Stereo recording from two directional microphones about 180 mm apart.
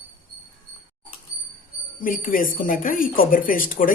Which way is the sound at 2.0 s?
50° left (ahead or behind).